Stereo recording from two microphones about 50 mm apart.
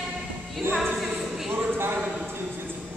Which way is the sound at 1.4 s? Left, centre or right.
Right.